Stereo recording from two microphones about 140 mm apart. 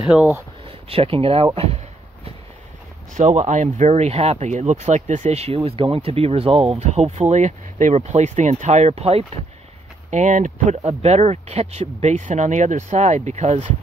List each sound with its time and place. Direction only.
0.0 s speech: 10° right (ahead or behind)
0.7 s speech: 45° right (ahead or behind)
3.2 s speech: 55° right (ahead or behind)
5.6 s speech: 40° right (ahead or behind)
10.1 s speech: 65° right (ahead or behind)
10.8 s speech: 50° right (ahead or behind)